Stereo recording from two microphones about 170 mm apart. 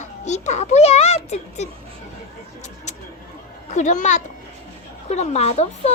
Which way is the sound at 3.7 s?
45° left (ahead or behind).